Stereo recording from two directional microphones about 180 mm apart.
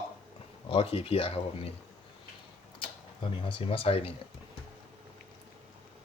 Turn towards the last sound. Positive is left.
turn(degrees=30)  # may be behind; listen again after turning